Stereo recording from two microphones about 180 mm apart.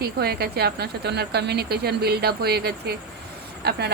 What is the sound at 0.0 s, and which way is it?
A woman's voice, 60° right (ahead or behind).